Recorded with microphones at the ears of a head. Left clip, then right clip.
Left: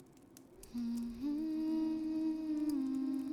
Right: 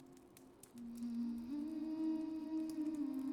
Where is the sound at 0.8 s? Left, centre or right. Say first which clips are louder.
Left 5 dB; left.